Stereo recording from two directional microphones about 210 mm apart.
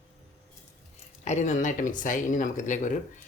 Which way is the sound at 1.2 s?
35° left (ahead or behind).